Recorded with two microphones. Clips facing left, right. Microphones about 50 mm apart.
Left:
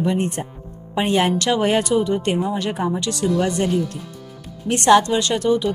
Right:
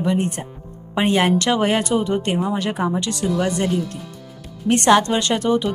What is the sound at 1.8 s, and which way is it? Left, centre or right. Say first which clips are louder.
Speech: left 1 dB; right.